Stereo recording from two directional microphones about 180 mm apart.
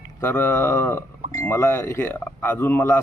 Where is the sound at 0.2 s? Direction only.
10° left (ahead or behind).